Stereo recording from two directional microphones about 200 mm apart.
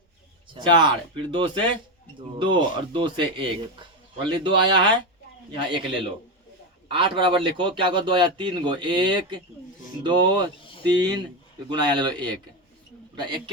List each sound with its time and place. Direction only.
0.5 s speech: 25° right (ahead or behind)